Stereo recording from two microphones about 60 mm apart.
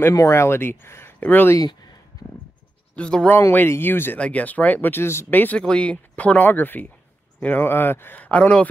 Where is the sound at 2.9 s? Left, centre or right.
Centre.